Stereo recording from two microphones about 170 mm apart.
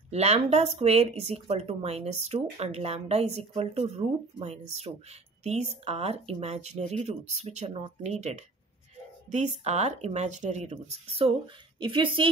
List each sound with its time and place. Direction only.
0.1 s speech: 40° right (ahead or behind)